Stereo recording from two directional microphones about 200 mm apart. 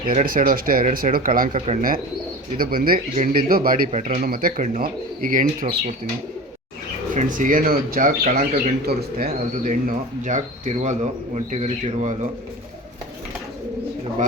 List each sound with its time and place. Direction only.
0.1 s speech: 40° right (ahead or behind)
7.1 s speech: 40° right (ahead or behind)
10.2 s speech: 35° right (ahead or behind)